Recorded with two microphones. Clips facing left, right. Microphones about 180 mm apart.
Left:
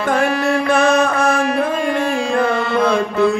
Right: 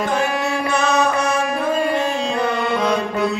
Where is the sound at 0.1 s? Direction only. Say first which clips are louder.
Left 4 dB; 55° left (ahead or behind).